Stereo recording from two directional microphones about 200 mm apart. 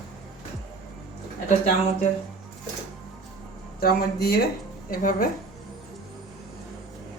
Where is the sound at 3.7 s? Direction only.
50° left (ahead or behind).